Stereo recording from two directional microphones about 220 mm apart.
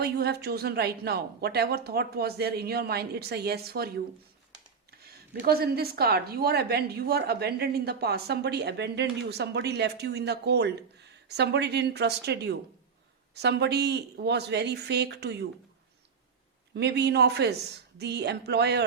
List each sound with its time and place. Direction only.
0.0 s speech: 45° right (ahead or behind)
16.7 s speech: 50° right (ahead or behind)